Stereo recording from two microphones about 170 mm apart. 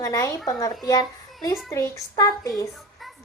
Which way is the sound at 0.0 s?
20° left (ahead or behind).